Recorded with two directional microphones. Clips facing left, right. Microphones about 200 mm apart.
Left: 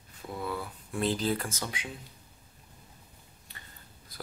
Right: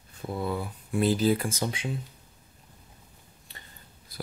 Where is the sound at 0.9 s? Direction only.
5° right (ahead or behind).